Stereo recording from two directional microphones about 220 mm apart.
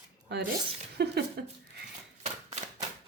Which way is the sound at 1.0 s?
50° right (ahead or behind).